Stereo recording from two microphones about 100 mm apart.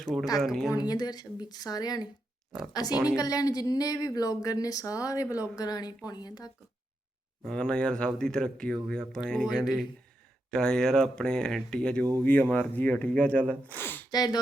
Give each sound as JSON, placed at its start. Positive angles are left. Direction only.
{"t": 0.0, "sound": "a woman's voice", "side_deg": 5}
{"t": 0.7, "sound": "speech", "side_deg": 40}
{"t": 3.2, "sound": "speech", "side_deg": 40}
{"t": 7.4, "sound": "speech", "side_deg": 10}
{"t": 14.1, "sound": "speech", "side_deg": 45}